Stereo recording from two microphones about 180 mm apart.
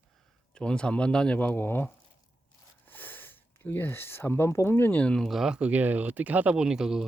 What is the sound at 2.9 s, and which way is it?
Speech, 10° left (ahead or behind).